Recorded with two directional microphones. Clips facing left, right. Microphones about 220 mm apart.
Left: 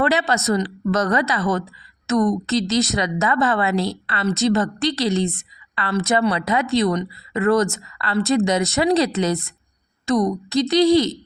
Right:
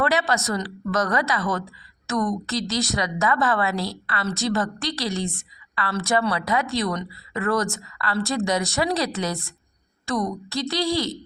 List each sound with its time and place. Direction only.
0.0 s speech: 25° left (ahead or behind)